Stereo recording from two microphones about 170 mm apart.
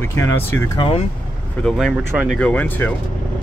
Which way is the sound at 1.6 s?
5° left (ahead or behind).